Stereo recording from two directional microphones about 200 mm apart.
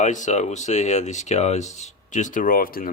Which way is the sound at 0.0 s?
35° left (ahead or behind).